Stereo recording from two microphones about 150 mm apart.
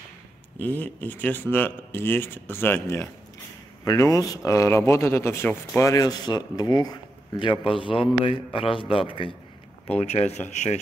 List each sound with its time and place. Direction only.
0.6 s speech: 10° left (ahead or behind); by 10.8 s 50° left (ahead or behind)